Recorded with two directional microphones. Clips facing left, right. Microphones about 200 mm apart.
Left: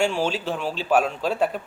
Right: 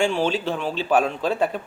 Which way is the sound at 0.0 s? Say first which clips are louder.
Right 2 dB; 5° left (ahead or behind).